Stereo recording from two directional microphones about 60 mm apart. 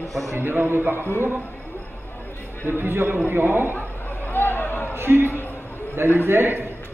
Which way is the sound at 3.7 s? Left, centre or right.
Left.